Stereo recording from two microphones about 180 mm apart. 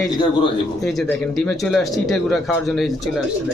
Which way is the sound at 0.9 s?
5° left (ahead or behind).